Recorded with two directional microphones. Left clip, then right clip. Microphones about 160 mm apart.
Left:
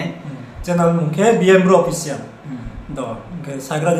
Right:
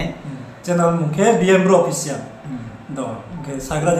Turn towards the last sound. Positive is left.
turn(degrees=25)  # may be behind; listen again after turning